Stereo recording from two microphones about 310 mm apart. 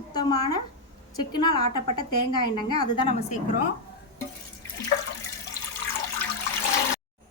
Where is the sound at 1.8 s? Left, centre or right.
Left.